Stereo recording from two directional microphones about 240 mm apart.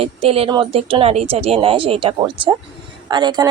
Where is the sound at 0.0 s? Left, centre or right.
Right.